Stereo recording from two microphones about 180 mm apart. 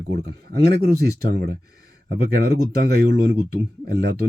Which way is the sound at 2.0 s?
60° right (ahead or behind).